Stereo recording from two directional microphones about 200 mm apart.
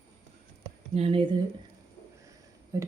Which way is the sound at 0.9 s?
30° right (ahead or behind).